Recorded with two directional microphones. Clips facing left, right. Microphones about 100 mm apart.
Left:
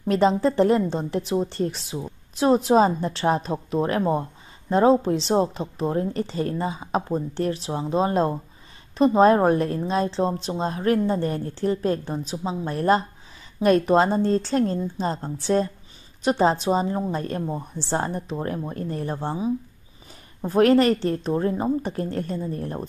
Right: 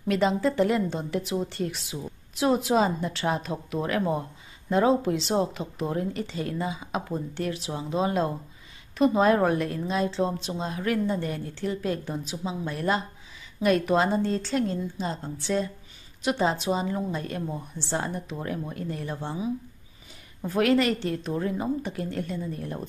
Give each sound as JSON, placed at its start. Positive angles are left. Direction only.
{"t": 0.1, "sound": "a woman's voice", "side_deg": 35}